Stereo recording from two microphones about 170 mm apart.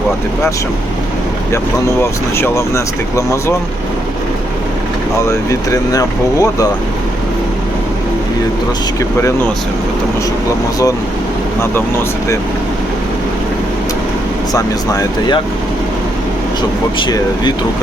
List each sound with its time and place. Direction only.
2.0 s speech: 15° left (ahead or behind)
5.3 s speech: 20° left (ahead or behind)
14.5 s speech: 20° left (ahead or behind)
17.0 s speech: 25° left (ahead or behind)